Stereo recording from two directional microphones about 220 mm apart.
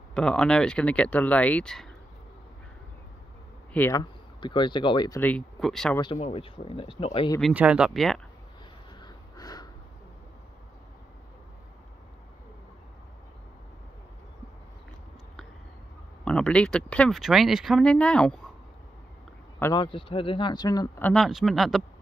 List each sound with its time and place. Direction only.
0.1 s speech: 5° left (ahead or behind)
3.7 s speech: 10° left (ahead or behind)
6.1 s speech: 30° left (ahead or behind)
7.3 s speech: centre (ahead or behind)
9.0 s a sound: 15° left (ahead or behind)
16.3 s speech: 5° left (ahead or behind)
19.6 s speech: 20° left (ahead or behind)
21.1 s speech: centre (ahead or behind)